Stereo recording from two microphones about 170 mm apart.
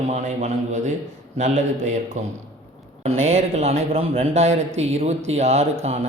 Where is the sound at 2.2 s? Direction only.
45° right (ahead or behind).